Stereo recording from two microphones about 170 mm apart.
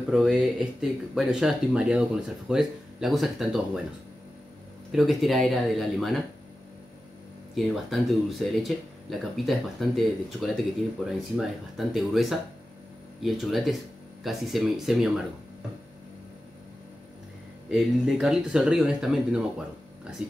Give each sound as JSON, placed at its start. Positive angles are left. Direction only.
{"t": 0.1, "sound": "speech", "side_deg": -5}
{"t": 4.9, "sound": "speech", "side_deg": 0}
{"t": 7.5, "sound": "speech", "side_deg": 0}
{"t": 17.6, "sound": "speech", "side_deg": -5}